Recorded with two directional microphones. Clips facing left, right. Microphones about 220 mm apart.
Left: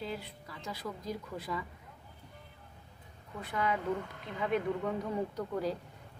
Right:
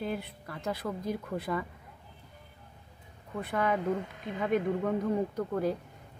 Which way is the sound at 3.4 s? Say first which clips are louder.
Right 4 dB; 55° right (ahead or behind).